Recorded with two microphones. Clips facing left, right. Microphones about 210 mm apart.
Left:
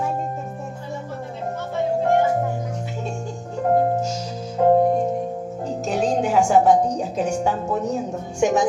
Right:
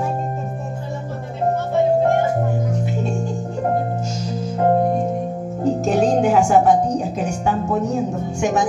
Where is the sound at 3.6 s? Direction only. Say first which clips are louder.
Left 2 dB; 65° right (ahead or behind).